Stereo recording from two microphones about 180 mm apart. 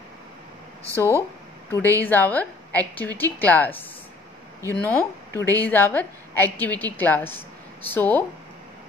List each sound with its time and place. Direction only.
0.8 s speech: 15° right (ahead or behind)
1.7 s a woman's voice: 10° left (ahead or behind)
4.7 s a woman's voice: 10° left (ahead or behind)